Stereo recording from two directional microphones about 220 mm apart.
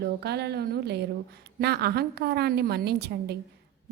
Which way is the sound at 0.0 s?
50° right (ahead or behind).